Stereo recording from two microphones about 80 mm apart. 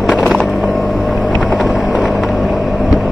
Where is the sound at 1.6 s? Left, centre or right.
Centre.